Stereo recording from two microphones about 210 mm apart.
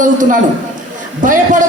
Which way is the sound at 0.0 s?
40° right (ahead or behind).